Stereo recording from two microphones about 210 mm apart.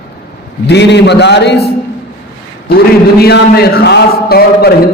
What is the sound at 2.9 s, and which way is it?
A man's voice, 50° left (ahead or behind).